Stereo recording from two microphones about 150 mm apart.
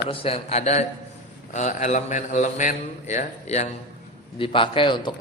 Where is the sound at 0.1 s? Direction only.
40° left (ahead or behind).